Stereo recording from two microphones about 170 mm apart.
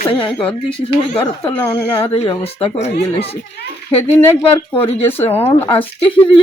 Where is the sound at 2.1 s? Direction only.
35° left (ahead or behind).